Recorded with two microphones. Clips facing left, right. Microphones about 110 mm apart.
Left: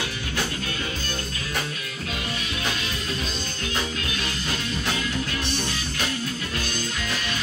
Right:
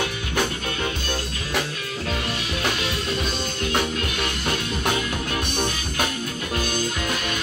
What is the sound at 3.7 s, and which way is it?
Music, 60° right (ahead or behind).